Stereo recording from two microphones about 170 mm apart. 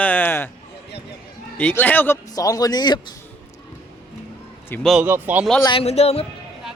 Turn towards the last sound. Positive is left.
turn(degrees=35)  # may be behind; listen again after turning